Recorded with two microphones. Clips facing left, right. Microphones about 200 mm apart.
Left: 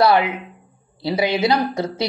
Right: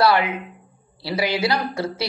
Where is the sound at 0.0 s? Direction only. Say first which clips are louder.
Left 2 dB; 25° left (ahead or behind).